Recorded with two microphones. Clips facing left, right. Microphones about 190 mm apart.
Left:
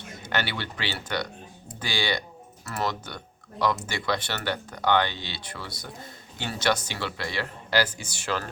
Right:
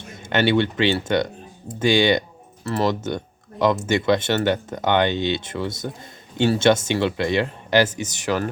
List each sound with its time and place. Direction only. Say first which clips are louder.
0.2 s speech: right 12 dB; 25° right (ahead or behind)